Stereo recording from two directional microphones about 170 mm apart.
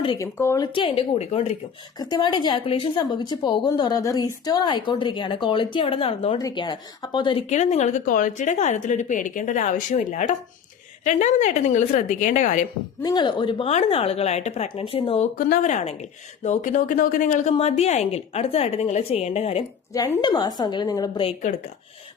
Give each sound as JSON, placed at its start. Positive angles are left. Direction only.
{"t": 0.2, "sound": "a woman's voice", "side_deg": 15}
{"t": 2.0, "sound": "a woman's voice", "side_deg": 25}
{"t": 7.5, "sound": "a woman's voice", "side_deg": 40}
{"t": 13.0, "sound": "a woman's voice", "side_deg": 25}
{"t": 15.4, "sound": "a woman's voice", "side_deg": 55}
{"t": 19.9, "sound": "a woman's voice", "side_deg": 25}